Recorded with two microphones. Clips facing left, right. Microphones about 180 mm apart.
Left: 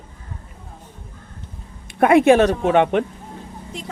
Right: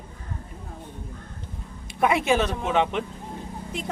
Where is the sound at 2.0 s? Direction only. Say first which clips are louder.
Left 9 dB; 55° left (ahead or behind).